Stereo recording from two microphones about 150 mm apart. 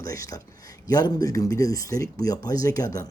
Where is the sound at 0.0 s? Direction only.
25° left (ahead or behind).